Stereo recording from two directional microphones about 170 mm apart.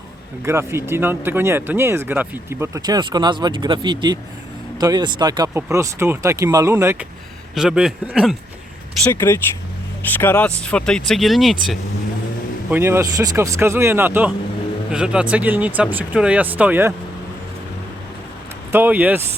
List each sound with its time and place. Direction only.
0.4 s speech: 15° right (ahead or behind)
7.5 s speech: 5° right (ahead or behind)
9.2 s speech: 15° left (ahead or behind); by 11.5 s centre (ahead or behind)
12.7 s speech: 15° right (ahead or behind)
18.7 s speech: 10° right (ahead or behind)